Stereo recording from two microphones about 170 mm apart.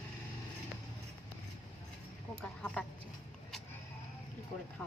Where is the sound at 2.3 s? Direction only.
5° left (ahead or behind).